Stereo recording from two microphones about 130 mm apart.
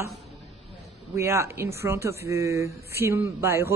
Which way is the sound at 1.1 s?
20° right (ahead or behind).